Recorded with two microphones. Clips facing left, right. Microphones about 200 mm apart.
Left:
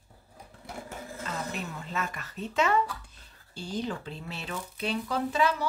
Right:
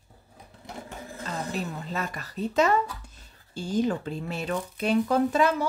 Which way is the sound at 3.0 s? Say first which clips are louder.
Right 4 dB; 45° right (ahead or behind).